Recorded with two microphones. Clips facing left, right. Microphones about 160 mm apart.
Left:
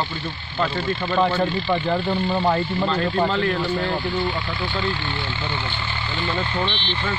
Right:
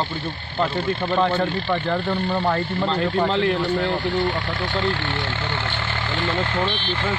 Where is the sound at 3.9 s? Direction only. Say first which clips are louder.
Right 2 dB; 75° right (ahead or behind); by 6.6 s 90° right.